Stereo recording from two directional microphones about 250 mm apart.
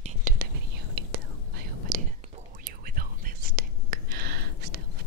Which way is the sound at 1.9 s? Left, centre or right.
Right.